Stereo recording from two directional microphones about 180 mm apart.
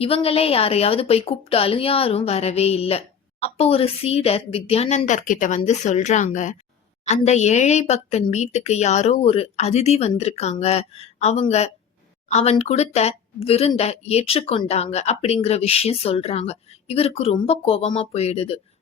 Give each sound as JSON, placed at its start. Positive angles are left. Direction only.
{"t": 0.0, "sound": "a woman's voice", "side_deg": 30}